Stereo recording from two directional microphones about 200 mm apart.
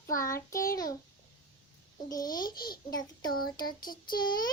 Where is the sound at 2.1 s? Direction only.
20° left (ahead or behind).